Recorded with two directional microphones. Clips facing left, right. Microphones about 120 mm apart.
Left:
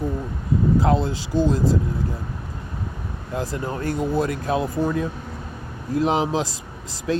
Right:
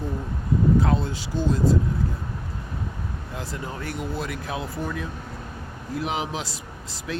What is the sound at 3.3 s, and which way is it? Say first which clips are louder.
Speech: left 8 dB; 35° left (ahead or behind).